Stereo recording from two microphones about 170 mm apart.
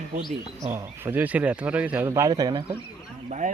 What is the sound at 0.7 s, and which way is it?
Speech, 15° right (ahead or behind).